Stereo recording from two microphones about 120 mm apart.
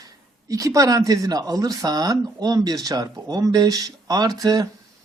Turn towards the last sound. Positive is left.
turn(degrees=-30)  # may be behind; listen again after turning